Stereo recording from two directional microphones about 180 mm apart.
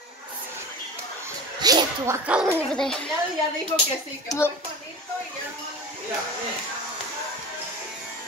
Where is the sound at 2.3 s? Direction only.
10° right (ahead or behind).